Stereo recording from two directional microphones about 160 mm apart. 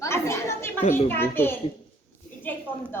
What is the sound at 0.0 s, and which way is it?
Chatter, 20° left (ahead or behind).